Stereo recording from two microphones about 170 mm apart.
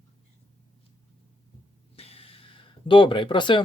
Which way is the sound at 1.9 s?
35° left (ahead or behind).